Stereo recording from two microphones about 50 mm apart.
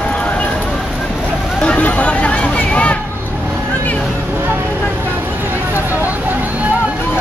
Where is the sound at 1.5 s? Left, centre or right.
Left.